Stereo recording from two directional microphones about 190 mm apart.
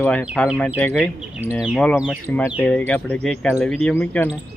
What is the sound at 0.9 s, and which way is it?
Speech, 5° right (ahead or behind).